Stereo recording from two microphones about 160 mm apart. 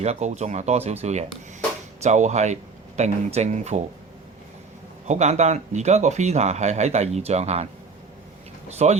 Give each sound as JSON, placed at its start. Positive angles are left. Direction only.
{"t": 0.0, "sound": "speech", "side_deg": -45}
{"t": 5.0, "sound": "speech", "side_deg": -45}
{"t": 8.8, "sound": "speech", "side_deg": -45}